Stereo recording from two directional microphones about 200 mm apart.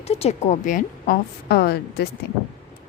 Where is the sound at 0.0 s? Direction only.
30° left (ahead or behind); by 2.0 s 50° left (ahead or behind).